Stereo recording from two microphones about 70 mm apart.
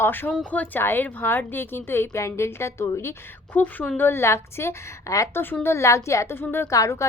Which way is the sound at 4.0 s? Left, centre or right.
Left.